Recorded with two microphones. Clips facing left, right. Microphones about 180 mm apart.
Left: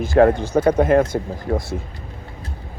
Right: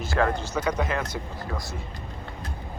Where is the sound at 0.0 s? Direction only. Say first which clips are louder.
Left 11 dB; 55° left (ahead or behind).